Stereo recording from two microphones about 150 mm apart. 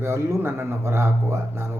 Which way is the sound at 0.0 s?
20° right (ahead or behind).